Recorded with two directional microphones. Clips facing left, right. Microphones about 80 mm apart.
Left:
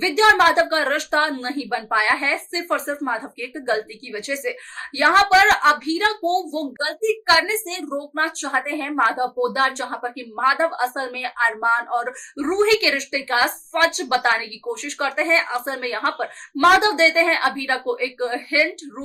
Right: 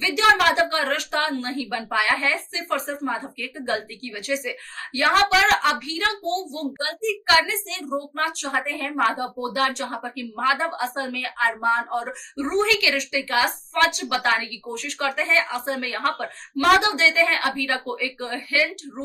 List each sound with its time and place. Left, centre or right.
0.0 s a woman's voice: left
6.7 s a woman's voice: left